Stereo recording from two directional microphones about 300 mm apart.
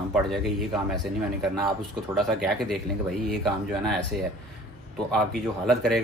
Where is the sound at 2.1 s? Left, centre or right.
Centre.